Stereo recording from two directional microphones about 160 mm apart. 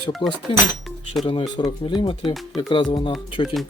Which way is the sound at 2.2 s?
Centre (ahead or behind).